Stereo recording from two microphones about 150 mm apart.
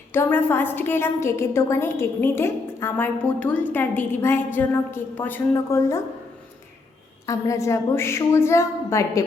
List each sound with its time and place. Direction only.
0.1 s a woman's voice: 15° left (ahead or behind)
7.3 s a woman's voice: 20° left (ahead or behind)